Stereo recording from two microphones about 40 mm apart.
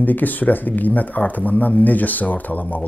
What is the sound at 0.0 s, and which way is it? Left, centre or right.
Speech, left.